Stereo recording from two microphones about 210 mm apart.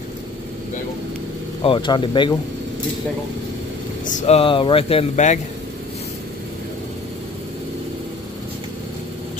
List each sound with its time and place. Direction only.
1.6 s speech: 25° left (ahead or behind)
4.0 s speech: 35° left (ahead or behind)